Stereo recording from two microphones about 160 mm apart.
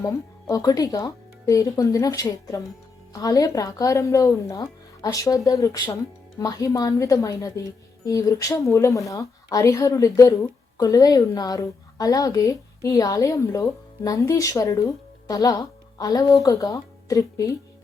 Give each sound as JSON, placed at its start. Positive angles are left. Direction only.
{"t": 0.0, "sound": "speech", "side_deg": 20}